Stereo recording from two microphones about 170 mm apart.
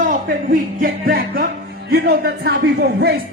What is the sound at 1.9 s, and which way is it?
A man's voice, 70° right (ahead or behind).